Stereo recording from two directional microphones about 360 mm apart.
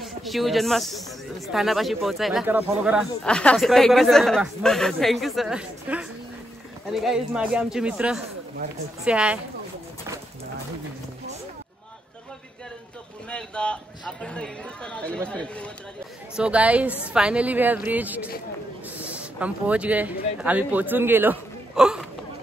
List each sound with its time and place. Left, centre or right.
0.0 s speech: centre
13.3 s speech: centre